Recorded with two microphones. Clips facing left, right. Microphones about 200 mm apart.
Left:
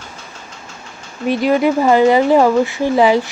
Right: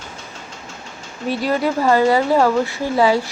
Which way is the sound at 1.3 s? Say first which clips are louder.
Left 5 dB; 15° left (ahead or behind).